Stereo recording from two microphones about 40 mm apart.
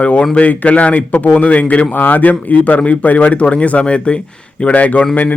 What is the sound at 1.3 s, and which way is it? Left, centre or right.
Speech, left.